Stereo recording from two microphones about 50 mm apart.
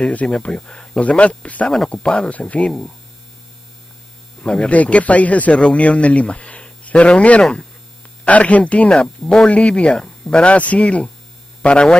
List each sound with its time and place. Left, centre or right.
0.0 s a man's voice: left
4.4 s a man's voice: left
9.2 s speech: centre
9.5 s a man's voice: left